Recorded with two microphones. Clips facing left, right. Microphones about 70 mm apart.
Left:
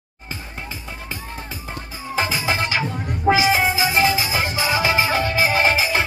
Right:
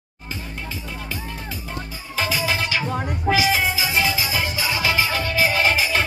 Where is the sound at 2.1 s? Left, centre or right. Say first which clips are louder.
Left 1 dB; left.